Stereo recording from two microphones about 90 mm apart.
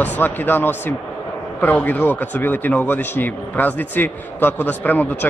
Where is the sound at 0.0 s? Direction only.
20° left (ahead or behind).